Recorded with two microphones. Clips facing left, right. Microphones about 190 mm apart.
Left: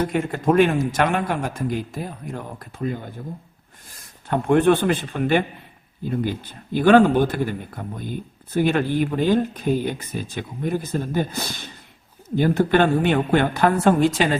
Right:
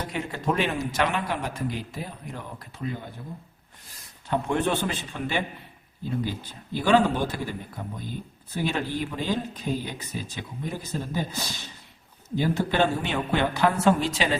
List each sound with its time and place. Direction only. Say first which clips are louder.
0.1 s a man's voice: left 8 dB; 50° left (ahead or behind)